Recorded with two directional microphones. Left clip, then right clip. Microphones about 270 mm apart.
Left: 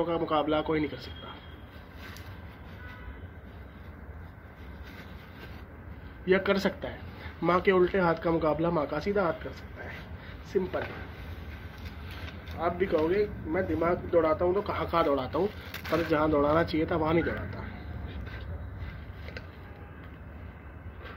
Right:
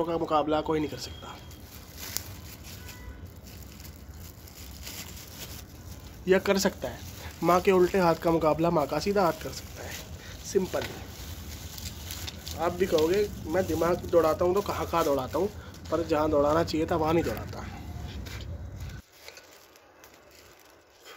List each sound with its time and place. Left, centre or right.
0.0 s speech: centre
6.2 s speech: centre
10.5 s speech: centre
12.5 s speech: right